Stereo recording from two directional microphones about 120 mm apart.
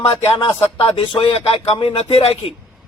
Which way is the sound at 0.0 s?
40° left (ahead or behind).